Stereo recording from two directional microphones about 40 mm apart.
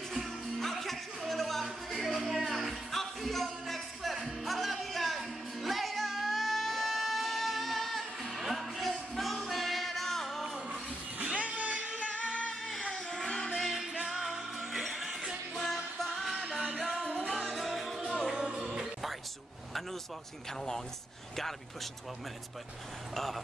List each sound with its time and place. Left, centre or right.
0.1 s music: centre
11.2 s music: right
12.4 s music: centre
13.6 s music: centre
14.0 s music: centre
15.5 s music: centre
18.3 s music: centre
23.1 s speech: centre